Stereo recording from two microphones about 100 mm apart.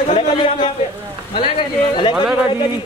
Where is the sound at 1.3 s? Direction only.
55° left (ahead or behind).